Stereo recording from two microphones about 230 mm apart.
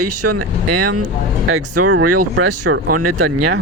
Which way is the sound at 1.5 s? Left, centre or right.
Right.